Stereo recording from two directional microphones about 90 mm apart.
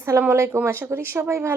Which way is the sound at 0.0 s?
25° right (ahead or behind).